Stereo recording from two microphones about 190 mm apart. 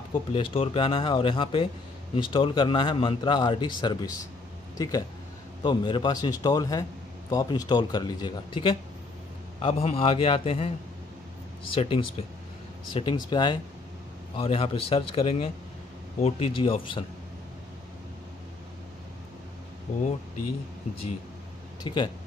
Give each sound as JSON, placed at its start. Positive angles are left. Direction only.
{"t": 0.3, "sound": "a man's voice", "side_deg": 30}
{"t": 11.7, "sound": "a man's voice", "side_deg": 30}
{"t": 19.9, "sound": "a man's voice", "side_deg": 40}
{"t": 21.8, "sound": "a man's voice", "side_deg": 25}